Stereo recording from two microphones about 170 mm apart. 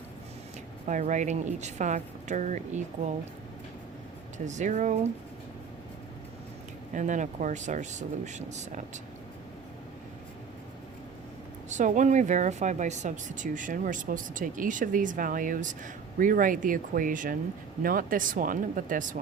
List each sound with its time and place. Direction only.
0.9 s speech: 45° right (ahead or behind)
4.4 s speech: 45° right (ahead or behind)
6.9 s speech: 45° right (ahead or behind)
11.7 s speech: 45° right (ahead or behind)